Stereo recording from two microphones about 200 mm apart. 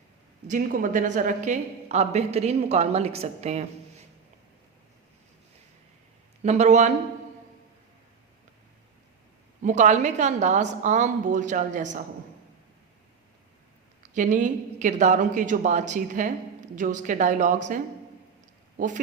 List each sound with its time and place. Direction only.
0.4 s a woman's voice: 40° right (ahead or behind)
6.4 s a woman's voice: 35° right (ahead or behind)
9.6 s a woman's voice: 40° right (ahead or behind)
14.1 s a woman's voice: 40° right (ahead or behind)